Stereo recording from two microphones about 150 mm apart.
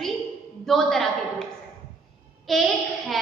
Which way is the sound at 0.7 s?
Centre (ahead or behind).